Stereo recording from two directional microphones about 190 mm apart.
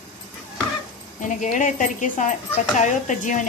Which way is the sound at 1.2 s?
40° left (ahead or behind).